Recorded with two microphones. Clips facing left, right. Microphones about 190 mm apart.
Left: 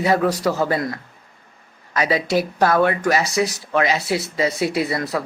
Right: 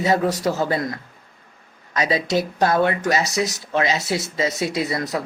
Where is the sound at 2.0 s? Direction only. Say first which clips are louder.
Left 1 dB; 20° right (ahead or behind).